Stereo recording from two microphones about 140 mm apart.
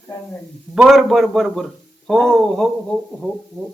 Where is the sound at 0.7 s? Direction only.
Centre (ahead or behind).